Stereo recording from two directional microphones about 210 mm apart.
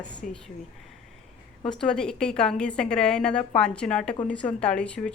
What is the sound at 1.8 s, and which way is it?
A woman's voice, 5° left (ahead or behind).